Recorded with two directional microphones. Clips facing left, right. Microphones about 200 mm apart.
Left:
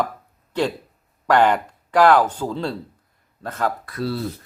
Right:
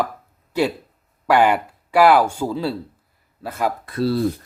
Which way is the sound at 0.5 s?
10° right (ahead or behind).